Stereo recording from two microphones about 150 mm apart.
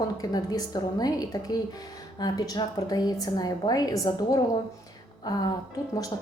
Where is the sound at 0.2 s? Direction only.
25° left (ahead or behind).